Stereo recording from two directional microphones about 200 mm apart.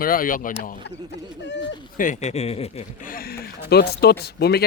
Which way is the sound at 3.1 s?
50° left (ahead or behind).